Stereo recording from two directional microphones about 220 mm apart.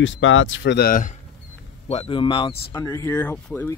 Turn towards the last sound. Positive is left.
turn(degrees=10)  # may be behind; listen again after turning